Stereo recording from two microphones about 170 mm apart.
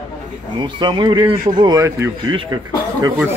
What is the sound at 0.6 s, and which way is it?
Speech, 25° right (ahead or behind).